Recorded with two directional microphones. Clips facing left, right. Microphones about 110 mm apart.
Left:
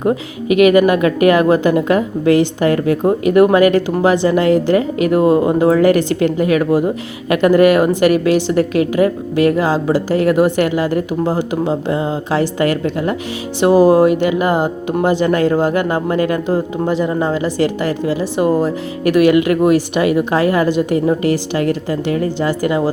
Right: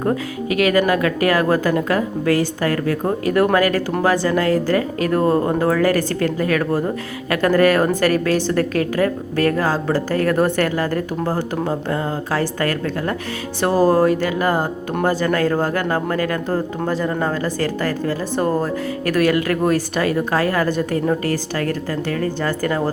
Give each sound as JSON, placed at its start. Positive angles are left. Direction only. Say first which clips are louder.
{"t": 0.0, "sound": "speech", "louder": "left 3 dB", "side_deg": 20}